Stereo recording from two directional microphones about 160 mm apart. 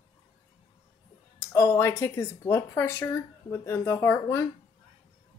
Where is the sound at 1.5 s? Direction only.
15° left (ahead or behind).